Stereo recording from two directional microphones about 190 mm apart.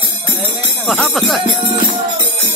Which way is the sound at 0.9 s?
Centre (ahead or behind).